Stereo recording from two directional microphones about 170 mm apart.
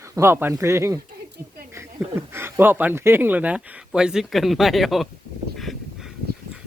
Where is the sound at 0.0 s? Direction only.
15° right (ahead or behind).